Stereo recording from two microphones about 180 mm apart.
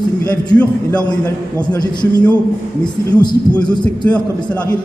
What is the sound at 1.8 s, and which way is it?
A man's voice, 25° left (ahead or behind).